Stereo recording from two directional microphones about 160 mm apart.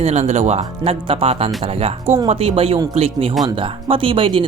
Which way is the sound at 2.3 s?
40° right (ahead or behind).